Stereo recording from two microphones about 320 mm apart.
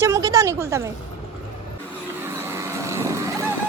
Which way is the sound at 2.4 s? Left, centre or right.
Centre.